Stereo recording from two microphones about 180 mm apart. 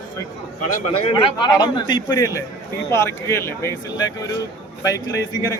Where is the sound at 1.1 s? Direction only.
30° left (ahead or behind).